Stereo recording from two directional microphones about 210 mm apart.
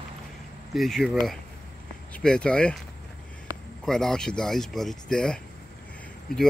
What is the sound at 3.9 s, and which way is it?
Speech, centre (ahead or behind).